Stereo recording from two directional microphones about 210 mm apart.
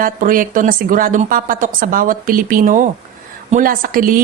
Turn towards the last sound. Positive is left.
turn(degrees=-40)  # may be behind; listen again after turning